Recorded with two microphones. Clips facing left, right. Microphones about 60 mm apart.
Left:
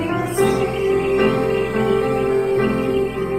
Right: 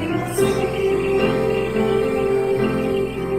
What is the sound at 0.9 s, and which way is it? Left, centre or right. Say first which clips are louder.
Music: left 3 dB; left.